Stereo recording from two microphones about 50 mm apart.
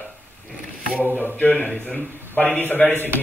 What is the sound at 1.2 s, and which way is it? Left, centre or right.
Speech, left.